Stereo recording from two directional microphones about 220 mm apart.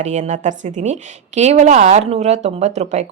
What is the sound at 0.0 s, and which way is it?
Speech, 30° right (ahead or behind).